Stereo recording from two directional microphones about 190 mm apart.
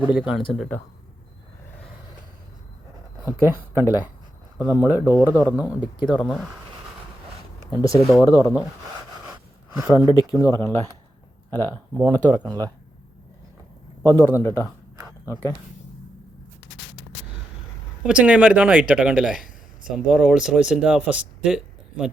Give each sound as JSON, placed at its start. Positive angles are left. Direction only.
{"t": 0.0, "sound": "speech", "side_deg": -5}
{"t": 3.2, "sound": "speech", "side_deg": -15}
{"t": 7.7, "sound": "speech", "side_deg": 20}
{"t": 9.7, "sound": "speech", "side_deg": -5}
{"t": 10.2, "sound": "speech", "side_deg": 20}
{"t": 11.5, "sound": "speech", "side_deg": 10}
{"t": 11.9, "sound": "speech", "side_deg": -20}
{"t": 14.0, "sound": "speech", "side_deg": -15}
{"t": 14.4, "sound": "speech", "side_deg": 15}
{"t": 18.0, "sound": "speech", "side_deg": -5}